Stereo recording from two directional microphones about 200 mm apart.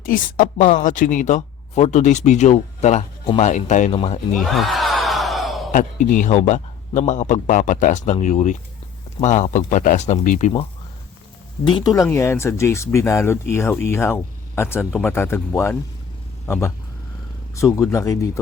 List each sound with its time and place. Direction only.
0.0 s speech: 45° left (ahead or behind)
4.4 s a sound: centre (ahead or behind)
5.7 s speech: 40° left (ahead or behind)
11.6 s speech: 20° left (ahead or behind)